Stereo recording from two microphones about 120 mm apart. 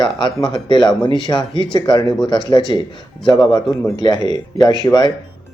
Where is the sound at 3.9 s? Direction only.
35° left (ahead or behind).